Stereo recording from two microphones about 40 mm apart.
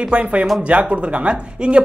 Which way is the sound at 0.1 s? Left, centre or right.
Right.